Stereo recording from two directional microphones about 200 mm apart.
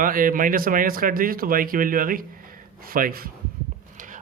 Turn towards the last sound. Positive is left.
turn(degrees=-45)  # may be behind; listen again after turning